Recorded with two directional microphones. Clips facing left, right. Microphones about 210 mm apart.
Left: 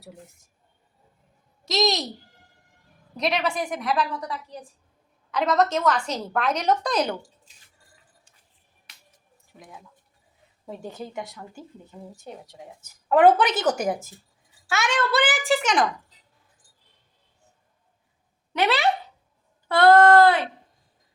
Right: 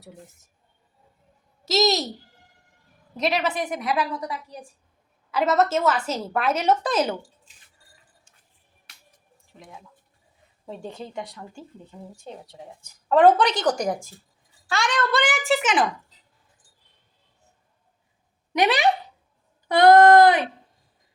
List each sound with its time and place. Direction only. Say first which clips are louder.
1.6 s a child's voice: right 2 dB; centre (ahead or behind)
3.2 s speech: right 1 dB; 5° right (ahead or behind)
10.7 s a woman's voice: even; 5° left (ahead or behind)
18.5 s a sound: right 2 dB; 15° right (ahead or behind)